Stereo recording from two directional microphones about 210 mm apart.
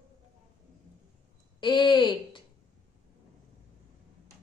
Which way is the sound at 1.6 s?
20° left (ahead or behind).